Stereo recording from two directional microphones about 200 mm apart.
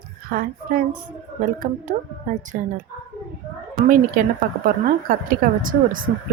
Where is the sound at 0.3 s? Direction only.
45° right (ahead or behind).